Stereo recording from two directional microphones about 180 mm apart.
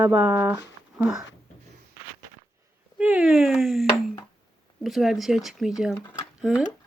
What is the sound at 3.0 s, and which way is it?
Speech, 5° right (ahead or behind).